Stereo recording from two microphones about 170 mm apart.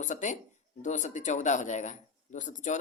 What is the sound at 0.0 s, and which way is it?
Speech, 45° left (ahead or behind).